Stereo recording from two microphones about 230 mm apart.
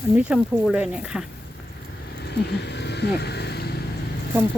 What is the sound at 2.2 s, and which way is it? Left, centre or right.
Vehicle, left.